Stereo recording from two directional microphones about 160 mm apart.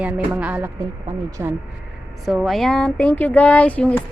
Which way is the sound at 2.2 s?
5° right (ahead or behind).